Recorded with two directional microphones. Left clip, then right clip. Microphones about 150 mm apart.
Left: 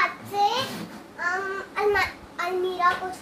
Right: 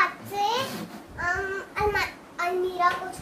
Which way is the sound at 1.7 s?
20° right (ahead or behind).